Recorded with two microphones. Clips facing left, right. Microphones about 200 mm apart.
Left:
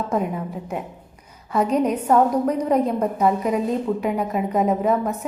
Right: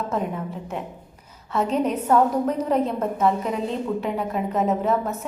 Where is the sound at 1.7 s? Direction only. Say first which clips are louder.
Left 2 dB; 10° left (ahead or behind).